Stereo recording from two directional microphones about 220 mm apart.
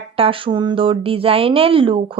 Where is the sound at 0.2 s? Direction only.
25° right (ahead or behind).